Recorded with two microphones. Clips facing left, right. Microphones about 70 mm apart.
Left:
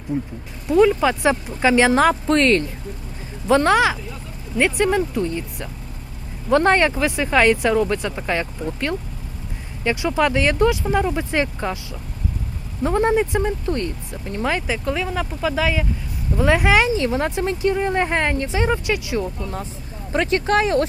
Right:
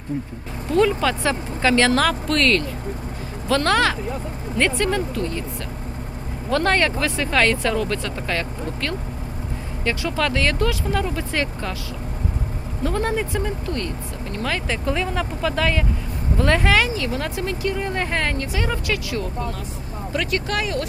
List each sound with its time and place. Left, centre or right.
0.1 s speech: centre
12.8 s speech: left
14.7 s speech: centre
20.1 s speech: left